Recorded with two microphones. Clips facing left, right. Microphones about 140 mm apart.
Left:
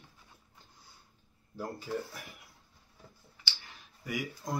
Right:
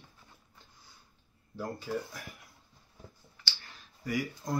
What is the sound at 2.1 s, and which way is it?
Speech, 20° left (ahead or behind).